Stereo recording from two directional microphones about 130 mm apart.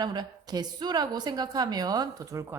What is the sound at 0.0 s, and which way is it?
A woman's voice, 30° right (ahead or behind).